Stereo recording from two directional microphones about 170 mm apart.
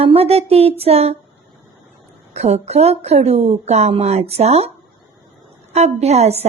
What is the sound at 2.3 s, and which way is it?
A woman's voice, 40° right (ahead or behind).